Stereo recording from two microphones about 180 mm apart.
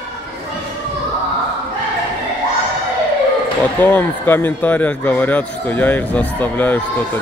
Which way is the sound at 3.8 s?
10° left (ahead or behind).